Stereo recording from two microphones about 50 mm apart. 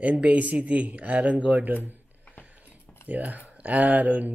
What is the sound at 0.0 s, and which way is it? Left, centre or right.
Speech, right.